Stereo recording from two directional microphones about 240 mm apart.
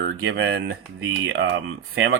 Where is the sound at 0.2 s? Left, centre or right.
Right.